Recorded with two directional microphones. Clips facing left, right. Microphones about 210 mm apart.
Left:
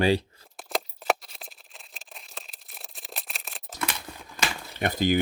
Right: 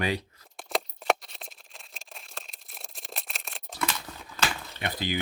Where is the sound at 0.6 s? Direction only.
Centre (ahead or behind).